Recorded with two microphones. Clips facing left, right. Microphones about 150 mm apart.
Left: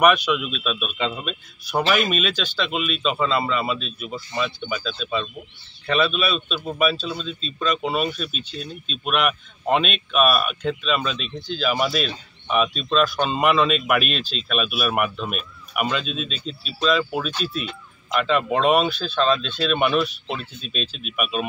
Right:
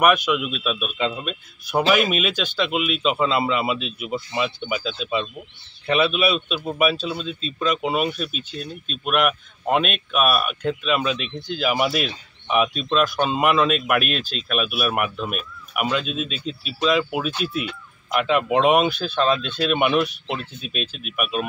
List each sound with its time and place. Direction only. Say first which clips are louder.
0.0 s speech: even; 5° right (ahead or behind)
8.3 s speech: right 1 dB; 55° right (ahead or behind)
9.0 s speech: right 2 dB; 5° right (ahead or behind)
20.8 s speech: even; 50° right (ahead or behind)
21.2 s speech: even; centre (ahead or behind)